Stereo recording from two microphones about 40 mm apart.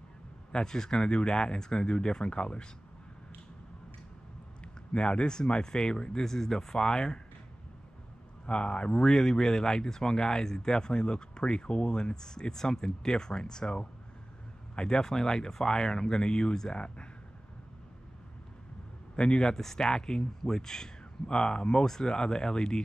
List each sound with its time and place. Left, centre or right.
0.5 s speech: centre
4.9 s speech: left
8.5 s speech: left
14.8 s speech: centre
19.1 s speech: left
19.5 s speech: centre